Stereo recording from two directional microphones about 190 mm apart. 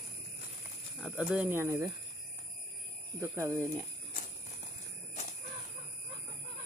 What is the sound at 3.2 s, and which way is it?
Speech, 15° right (ahead or behind).